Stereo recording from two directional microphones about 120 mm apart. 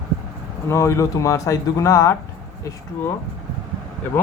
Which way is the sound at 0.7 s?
25° left (ahead or behind).